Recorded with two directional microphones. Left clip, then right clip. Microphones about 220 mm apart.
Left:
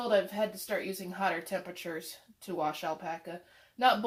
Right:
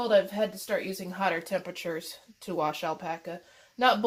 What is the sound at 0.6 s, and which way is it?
Speech, 40° right (ahead or behind).